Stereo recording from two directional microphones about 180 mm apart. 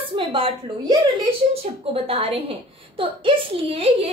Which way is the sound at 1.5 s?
35° right (ahead or behind).